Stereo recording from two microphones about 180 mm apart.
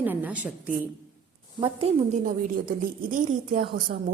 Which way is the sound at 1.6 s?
40° right (ahead or behind).